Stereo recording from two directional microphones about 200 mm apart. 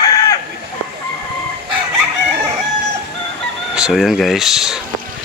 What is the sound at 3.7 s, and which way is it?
Speech, centre (ahead or behind).